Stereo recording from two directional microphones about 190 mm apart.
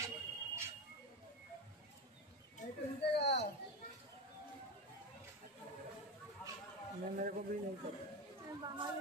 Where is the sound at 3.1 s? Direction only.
65° left (ahead or behind).